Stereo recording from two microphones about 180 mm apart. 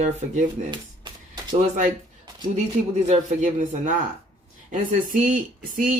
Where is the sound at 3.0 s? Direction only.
40° right (ahead or behind).